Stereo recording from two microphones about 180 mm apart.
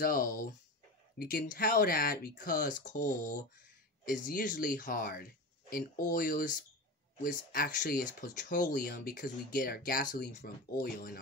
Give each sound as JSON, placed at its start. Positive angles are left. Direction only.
{"t": 0.0, "sound": "speech", "side_deg": 55}